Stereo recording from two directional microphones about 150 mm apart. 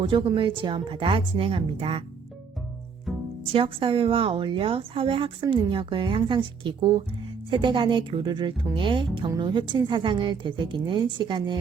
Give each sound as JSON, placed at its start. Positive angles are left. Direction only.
{"t": 0.0, "sound": "a woman's voice", "side_deg": -25}
{"t": 3.1, "sound": "pizzicato", "side_deg": 0}
{"t": 3.4, "sound": "a woman's voice", "side_deg": -35}